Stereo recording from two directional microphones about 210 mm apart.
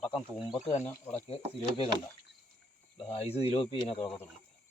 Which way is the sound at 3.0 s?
30° left (ahead or behind).